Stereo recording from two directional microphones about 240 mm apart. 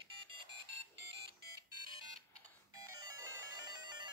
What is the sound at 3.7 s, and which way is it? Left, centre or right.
Music, centre.